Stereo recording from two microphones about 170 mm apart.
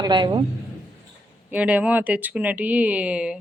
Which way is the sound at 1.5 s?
10° right (ahead or behind).